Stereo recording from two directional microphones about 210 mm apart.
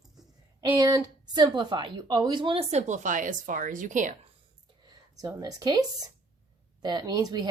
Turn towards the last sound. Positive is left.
turn(degrees=-20)  # may be behind; listen again after turning